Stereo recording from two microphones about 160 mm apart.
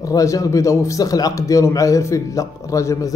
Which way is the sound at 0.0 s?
20° left (ahead or behind).